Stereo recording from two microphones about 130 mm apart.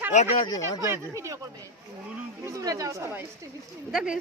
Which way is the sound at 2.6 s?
30° right (ahead or behind).